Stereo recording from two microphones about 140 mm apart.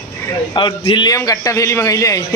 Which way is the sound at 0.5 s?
35° left (ahead or behind).